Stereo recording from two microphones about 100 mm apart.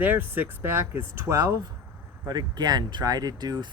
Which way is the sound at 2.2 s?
45° right (ahead or behind).